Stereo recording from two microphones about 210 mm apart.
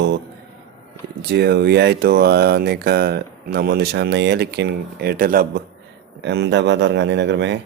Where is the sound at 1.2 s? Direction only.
50° right (ahead or behind).